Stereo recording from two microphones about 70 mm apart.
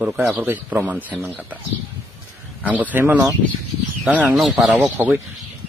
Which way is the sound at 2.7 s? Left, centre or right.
Right.